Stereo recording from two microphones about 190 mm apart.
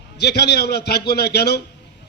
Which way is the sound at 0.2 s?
60° left (ahead or behind).